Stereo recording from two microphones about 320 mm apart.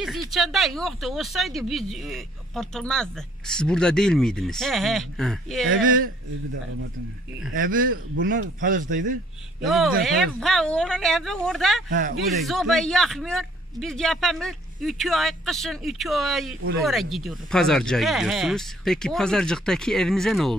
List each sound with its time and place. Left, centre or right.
0.0 s speech: centre
7.5 s speech: right
9.7 s speech: centre
11.9 s speech: right
12.3 s speech: centre